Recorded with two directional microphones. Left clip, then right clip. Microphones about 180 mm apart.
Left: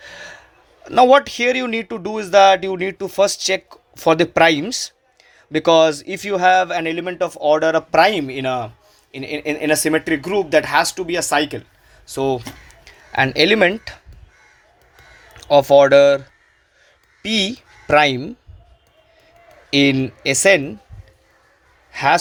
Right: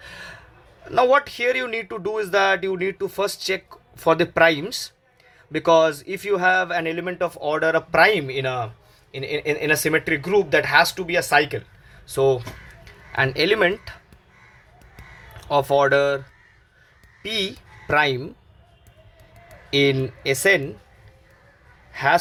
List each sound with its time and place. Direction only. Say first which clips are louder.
0.0 s gasp: left 3 dB; 25° left (ahead or behind)
0.9 s speech: left 6 dB; 40° left (ahead or behind)
15.4 s speech: left 8 dB; 35° left (ahead or behind)
17.2 s speech: left 5 dB; 40° left (ahead or behind)
19.7 s speech: left 3 dB; 35° left (ahead or behind)
21.9 s speech: left 3 dB; 40° left (ahead or behind)